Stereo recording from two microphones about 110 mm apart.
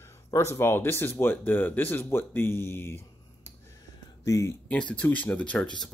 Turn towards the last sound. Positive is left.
turn(degrees=10)  # may be behind; listen again after turning